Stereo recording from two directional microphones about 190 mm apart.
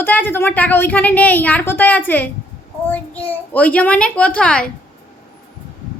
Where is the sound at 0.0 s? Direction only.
10° left (ahead or behind).